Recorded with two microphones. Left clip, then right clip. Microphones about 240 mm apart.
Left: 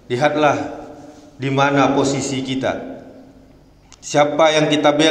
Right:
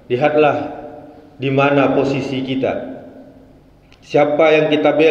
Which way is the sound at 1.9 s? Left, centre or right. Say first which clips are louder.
Right 1 dB; centre.